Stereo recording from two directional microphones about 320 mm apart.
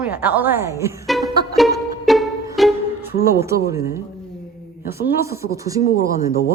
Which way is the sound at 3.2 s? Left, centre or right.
Centre.